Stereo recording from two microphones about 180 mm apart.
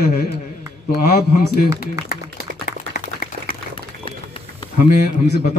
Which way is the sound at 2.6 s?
55° left (ahead or behind).